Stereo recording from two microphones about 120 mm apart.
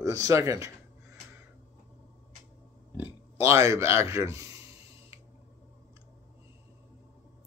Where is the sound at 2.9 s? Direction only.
20° right (ahead or behind).